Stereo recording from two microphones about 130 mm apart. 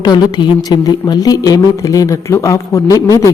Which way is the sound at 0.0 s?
35° left (ahead or behind).